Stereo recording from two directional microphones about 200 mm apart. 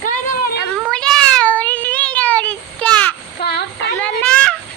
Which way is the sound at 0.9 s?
5° left (ahead or behind).